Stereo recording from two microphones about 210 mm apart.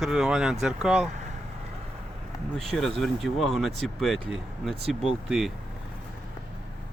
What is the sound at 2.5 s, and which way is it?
Speech, centre (ahead or behind).